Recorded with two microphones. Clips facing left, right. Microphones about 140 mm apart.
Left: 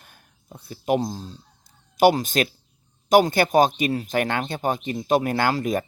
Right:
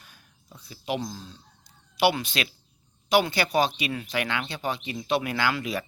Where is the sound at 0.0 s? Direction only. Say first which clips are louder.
Left 2 dB; 50° left (ahead or behind).